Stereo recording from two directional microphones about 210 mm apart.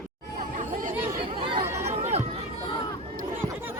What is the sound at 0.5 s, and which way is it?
Chatter, 40° right (ahead or behind).